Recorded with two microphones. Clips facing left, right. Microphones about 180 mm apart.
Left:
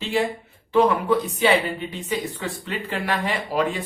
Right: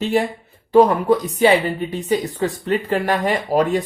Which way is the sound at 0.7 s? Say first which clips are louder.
Right 5 dB; 40° right (ahead or behind).